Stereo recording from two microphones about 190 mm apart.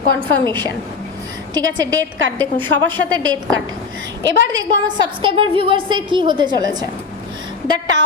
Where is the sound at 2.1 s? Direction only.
90° right.